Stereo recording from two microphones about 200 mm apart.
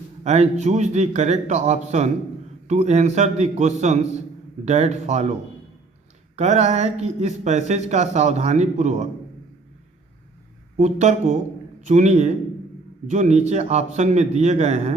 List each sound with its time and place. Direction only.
0.3 s speech: 35° right (ahead or behind)
6.3 s speech: 35° right (ahead or behind)
10.8 s speech: 35° right (ahead or behind)